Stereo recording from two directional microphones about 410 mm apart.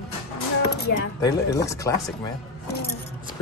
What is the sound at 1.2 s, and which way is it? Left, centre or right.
Speech, centre.